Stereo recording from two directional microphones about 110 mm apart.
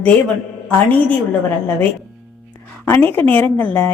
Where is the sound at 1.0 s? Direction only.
20° left (ahead or behind).